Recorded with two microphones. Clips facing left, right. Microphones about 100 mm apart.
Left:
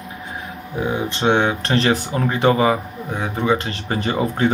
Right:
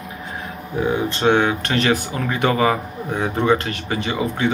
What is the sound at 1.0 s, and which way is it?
Speech, 20° left (ahead or behind).